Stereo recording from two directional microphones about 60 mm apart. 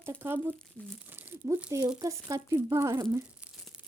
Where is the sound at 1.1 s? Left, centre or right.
Right.